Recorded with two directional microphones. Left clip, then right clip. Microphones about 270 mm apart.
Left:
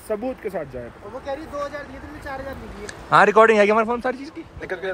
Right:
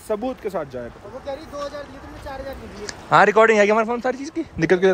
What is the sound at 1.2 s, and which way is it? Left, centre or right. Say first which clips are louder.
Speech: left 1 dB; left.